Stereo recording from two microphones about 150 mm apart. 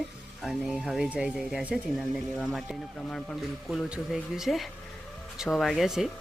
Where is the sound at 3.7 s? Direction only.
5° right (ahead or behind).